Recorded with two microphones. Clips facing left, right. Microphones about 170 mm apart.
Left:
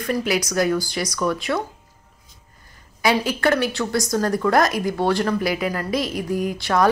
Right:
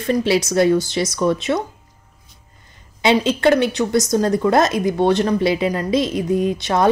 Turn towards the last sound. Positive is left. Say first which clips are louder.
# right 2 dB
turn(degrees=-20)  # may be behind; listen again after turning